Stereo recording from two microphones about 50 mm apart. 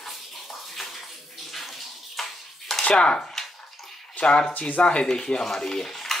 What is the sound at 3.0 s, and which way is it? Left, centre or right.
Speech, centre.